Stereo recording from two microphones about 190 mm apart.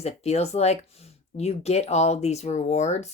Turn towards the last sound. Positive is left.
turn(degrees=35)  # may be behind; listen again after turning